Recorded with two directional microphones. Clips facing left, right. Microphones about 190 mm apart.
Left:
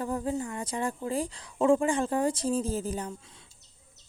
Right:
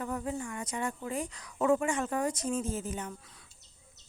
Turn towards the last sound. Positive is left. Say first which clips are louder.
# left 4 dB
turn(degrees=25)  # may be behind; listen again after turning